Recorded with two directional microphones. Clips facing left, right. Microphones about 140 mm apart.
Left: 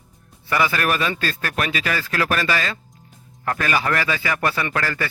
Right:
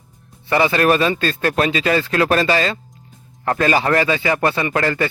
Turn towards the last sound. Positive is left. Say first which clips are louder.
# right 5 dB
turn(degrees=-25)  # may be behind; listen again after turning